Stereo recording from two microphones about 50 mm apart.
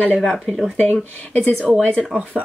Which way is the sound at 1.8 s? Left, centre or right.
Left.